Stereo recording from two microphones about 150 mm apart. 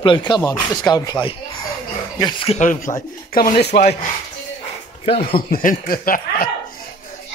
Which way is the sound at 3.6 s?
90° left.